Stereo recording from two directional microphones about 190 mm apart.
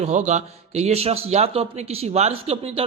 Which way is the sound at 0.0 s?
40° right (ahead or behind).